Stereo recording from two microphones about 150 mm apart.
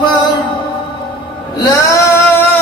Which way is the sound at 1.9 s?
20° left (ahead or behind).